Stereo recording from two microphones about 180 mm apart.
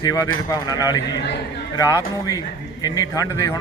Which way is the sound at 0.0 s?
20° left (ahead or behind).